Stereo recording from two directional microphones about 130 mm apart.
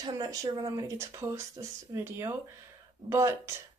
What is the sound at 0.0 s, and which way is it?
Speech, 25° right (ahead or behind).